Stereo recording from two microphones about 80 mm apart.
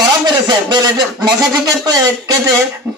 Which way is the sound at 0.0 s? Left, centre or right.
Right.